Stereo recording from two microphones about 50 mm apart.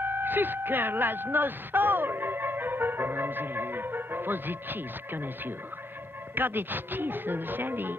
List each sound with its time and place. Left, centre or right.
0.0 s vehicle: right
6.3 s speech: right